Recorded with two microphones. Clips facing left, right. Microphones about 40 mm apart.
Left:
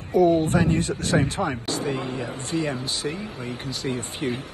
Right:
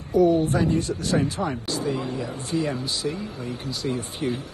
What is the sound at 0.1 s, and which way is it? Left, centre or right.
Speech, left.